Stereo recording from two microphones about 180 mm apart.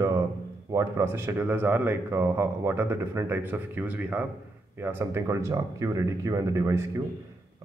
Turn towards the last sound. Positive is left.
turn(degrees=-15)  # may be behind; listen again after turning